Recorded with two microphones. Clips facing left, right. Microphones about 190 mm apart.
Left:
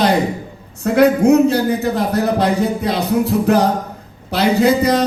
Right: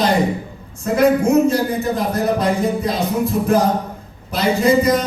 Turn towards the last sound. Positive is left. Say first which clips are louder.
# left 1 dB
turn(degrees=70)  # may be behind; listen again after turning